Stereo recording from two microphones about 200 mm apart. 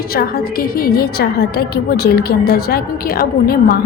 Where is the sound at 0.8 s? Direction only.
50° left (ahead or behind).